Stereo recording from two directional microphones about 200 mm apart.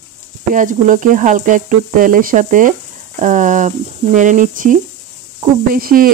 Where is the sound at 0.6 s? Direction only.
40° right (ahead or behind).